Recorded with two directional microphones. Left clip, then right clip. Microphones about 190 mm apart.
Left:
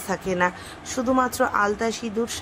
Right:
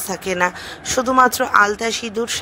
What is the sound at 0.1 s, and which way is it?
A woman's voice, 40° right (ahead or behind).